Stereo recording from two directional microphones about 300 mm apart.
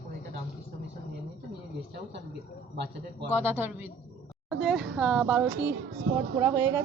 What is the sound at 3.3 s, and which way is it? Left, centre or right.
A woman's voice, centre.